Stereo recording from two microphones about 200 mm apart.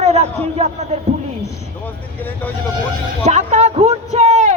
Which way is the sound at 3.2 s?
35° right (ahead or behind).